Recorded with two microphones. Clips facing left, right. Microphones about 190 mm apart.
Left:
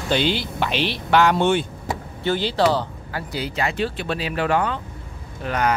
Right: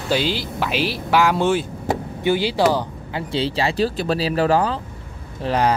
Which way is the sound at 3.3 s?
30° right (ahead or behind).